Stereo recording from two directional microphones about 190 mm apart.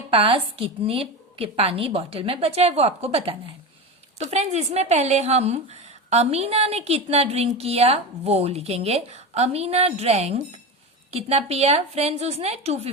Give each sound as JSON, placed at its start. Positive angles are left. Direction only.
{"t": 0.1, "sound": "a woman's voice", "side_deg": -30}